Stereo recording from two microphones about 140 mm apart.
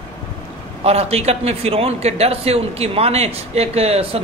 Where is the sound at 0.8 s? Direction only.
45° right (ahead or behind).